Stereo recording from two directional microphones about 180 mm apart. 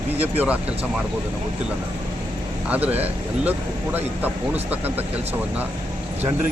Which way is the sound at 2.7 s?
10° right (ahead or behind).